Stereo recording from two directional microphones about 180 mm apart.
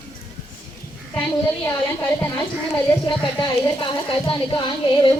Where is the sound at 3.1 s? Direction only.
25° left (ahead or behind).